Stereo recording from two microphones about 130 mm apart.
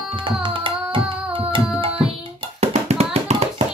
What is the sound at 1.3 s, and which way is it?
Tabla, 40° right (ahead or behind).